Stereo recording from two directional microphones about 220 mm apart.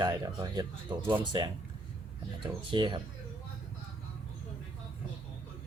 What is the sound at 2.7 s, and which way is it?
Speech, 20° right (ahead or behind).